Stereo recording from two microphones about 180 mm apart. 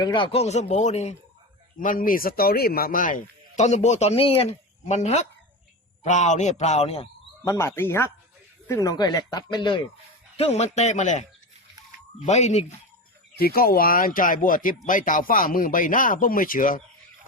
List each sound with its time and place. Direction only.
0.0 s speech: 25° left (ahead or behind)
1.8 s speech: 50° left (ahead or behind); by 7.1 s 35° left (ahead or behind)
7.4 s speech: 15° left (ahead or behind)
10.3 s speech: 35° left (ahead or behind)
13.4 s speech: 55° left (ahead or behind)